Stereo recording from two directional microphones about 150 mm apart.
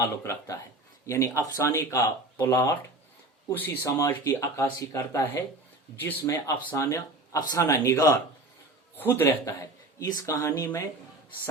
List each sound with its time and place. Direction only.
0.0 s speech: 20° left (ahead or behind)